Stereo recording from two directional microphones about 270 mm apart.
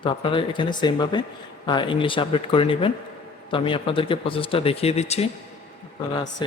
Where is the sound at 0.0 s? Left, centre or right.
Centre.